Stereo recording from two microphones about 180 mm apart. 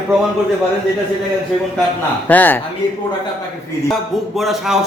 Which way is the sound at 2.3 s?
10° left (ahead or behind).